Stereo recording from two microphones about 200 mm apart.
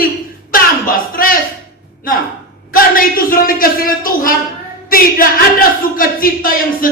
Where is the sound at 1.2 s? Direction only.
45° left (ahead or behind).